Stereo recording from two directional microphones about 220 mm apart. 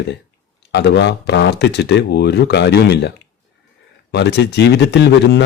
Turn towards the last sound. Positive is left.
turn(degrees=50)  # may be behind; listen again after turning